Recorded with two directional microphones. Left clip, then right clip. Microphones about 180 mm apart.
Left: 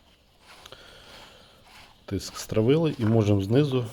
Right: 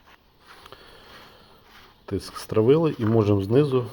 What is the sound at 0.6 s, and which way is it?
Sniff, 25° left (ahead or behind).